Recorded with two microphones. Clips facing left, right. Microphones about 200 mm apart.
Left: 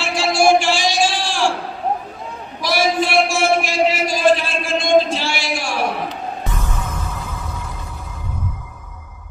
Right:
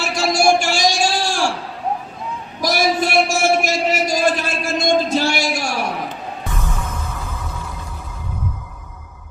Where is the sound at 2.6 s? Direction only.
40° right (ahead or behind).